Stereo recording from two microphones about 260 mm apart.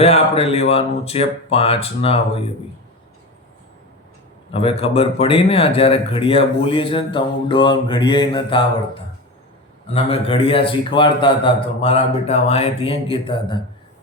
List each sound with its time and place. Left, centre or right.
0.0 s speech: left
4.5 s speech: left
9.9 s speech: left